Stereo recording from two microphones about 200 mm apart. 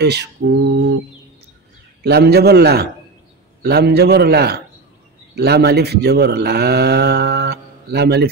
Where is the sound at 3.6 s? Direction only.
55° right (ahead or behind).